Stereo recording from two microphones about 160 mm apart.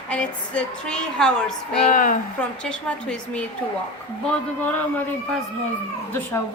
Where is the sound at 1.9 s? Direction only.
55° left (ahead or behind).